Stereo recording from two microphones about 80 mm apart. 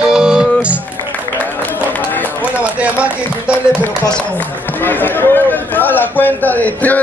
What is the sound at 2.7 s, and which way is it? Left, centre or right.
Speech, centre.